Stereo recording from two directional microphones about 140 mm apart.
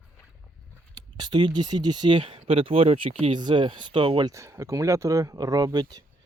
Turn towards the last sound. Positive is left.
turn(degrees=-30)  # may be behind; listen again after turning